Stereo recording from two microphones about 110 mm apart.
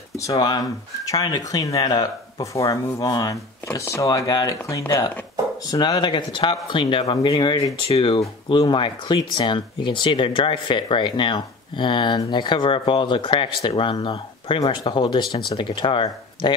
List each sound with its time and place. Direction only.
0.1 s speech: 30° left (ahead or behind)
5.7 s speech: 40° left (ahead or behind)